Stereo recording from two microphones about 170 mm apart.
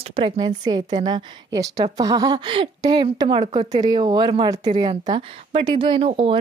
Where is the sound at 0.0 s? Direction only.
30° right (ahead or behind).